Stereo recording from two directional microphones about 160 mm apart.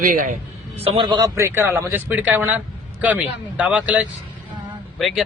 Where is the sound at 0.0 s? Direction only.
55° right (ahead or behind).